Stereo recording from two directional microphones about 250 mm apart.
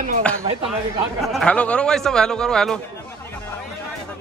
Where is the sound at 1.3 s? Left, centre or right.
Centre.